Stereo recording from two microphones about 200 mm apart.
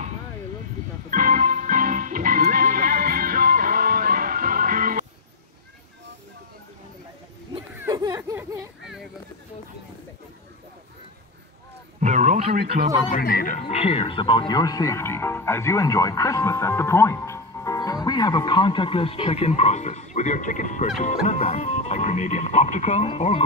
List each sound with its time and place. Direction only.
1.1 s music: 40° right (ahead or behind)
7.7 s a sound: 15° right (ahead or behind)
12.0 s a sound: 35° right (ahead or behind)
12.7 s speech: 50° right (ahead or behind)
13.1 s speech: 45° left (ahead or behind)
13.6 s speech: 30° left (ahead or behind)